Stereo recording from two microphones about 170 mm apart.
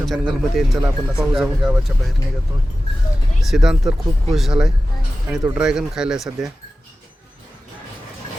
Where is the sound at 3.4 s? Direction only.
Centre (ahead or behind).